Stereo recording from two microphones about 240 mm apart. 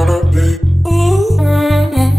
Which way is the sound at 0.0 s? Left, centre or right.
Centre.